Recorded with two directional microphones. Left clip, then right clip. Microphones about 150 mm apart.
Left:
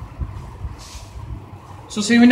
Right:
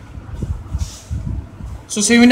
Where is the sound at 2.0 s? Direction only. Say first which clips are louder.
Right 3 dB; 40° right (ahead or behind).